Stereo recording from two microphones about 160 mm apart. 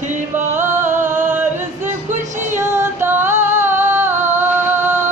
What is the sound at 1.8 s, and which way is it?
Music, 50° right (ahead or behind).